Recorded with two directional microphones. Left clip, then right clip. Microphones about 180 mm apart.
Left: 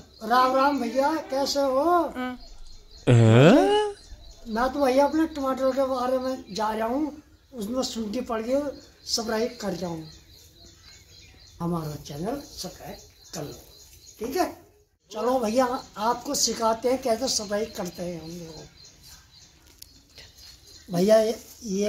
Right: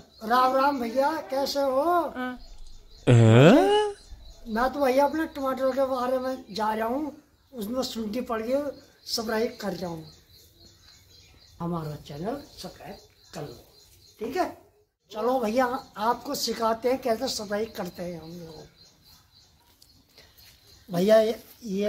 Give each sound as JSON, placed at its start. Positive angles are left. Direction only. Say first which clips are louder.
{"t": 0.2, "sound": "speech", "louder": "left 1 dB", "side_deg": -5}
{"t": 3.0, "sound": "a sound", "louder": "even", "side_deg": 0}
{"t": 4.6, "sound": "speech", "louder": "left 1 dB", "side_deg": -5}
{"t": 11.5, "sound": "speech", "louder": "left 2 dB", "side_deg": 0}
{"t": 15.0, "sound": "speech", "louder": "left 1 dB", "side_deg": 0}
{"t": 18.0, "sound": "speech", "louder": "left 2 dB", "side_deg": -15}
{"t": 20.9, "sound": "speech", "louder": "even", "side_deg": 0}